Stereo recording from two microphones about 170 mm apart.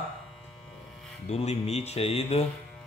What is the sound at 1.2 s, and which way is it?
Speech, 40° left (ahead or behind).